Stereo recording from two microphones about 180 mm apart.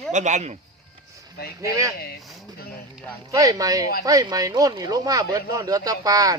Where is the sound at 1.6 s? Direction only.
15° right (ahead or behind).